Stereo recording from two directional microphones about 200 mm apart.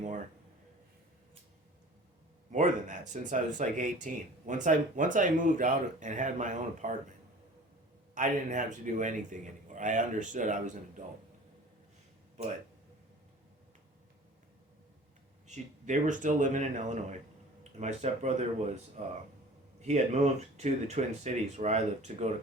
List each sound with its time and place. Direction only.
2.5 s speech: 35° right (ahead or behind)
8.1 s speech: 40° right (ahead or behind)
15.4 s speech: 35° right (ahead or behind)